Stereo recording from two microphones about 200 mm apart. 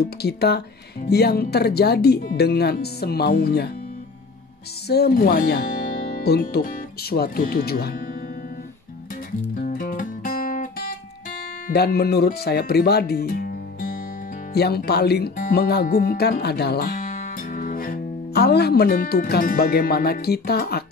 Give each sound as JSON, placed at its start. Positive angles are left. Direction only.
{"t": 0.0, "sound": "speech", "side_deg": 55}
{"t": 4.8, "sound": "speech", "side_deg": 50}
{"t": 9.6, "sound": "music", "side_deg": 45}
{"t": 11.6, "sound": "speech", "side_deg": 55}